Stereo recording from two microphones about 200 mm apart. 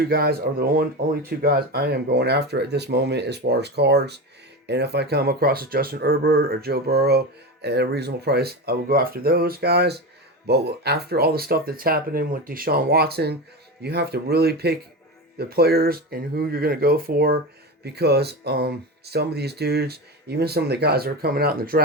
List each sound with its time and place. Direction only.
0.0 s speech: 50° right (ahead or behind)